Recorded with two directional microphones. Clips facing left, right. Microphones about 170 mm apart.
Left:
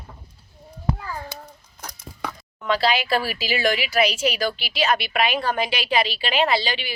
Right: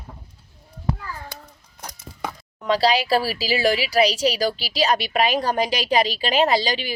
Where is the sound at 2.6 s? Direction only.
35° right (ahead or behind).